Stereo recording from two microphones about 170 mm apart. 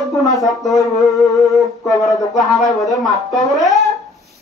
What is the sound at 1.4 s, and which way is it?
Music, centre (ahead or behind).